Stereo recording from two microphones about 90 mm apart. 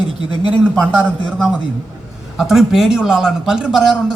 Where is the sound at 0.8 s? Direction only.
15° right (ahead or behind).